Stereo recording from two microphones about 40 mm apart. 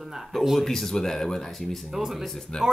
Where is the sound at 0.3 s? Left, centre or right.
Centre.